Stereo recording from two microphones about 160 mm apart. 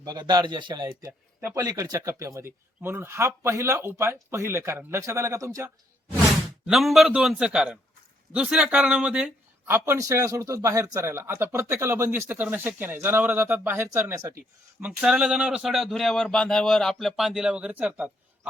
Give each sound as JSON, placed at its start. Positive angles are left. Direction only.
{"t": 0.0, "sound": "a man's voice", "side_deg": -25}
{"t": 6.7, "sound": "speech", "side_deg": 0}
{"t": 14.8, "sound": "speech", "side_deg": -5}